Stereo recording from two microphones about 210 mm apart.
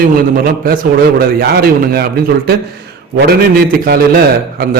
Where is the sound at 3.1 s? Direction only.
50° right (ahead or behind).